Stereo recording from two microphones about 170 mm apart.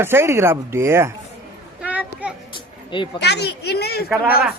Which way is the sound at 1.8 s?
10° right (ahead or behind).